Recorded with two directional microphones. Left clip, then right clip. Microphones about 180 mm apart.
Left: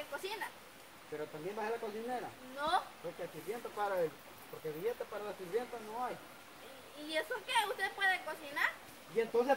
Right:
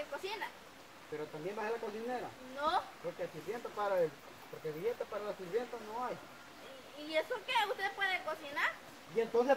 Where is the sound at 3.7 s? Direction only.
20° left (ahead or behind).